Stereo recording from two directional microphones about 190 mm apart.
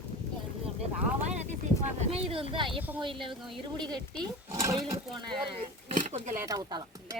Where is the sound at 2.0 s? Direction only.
30° right (ahead or behind).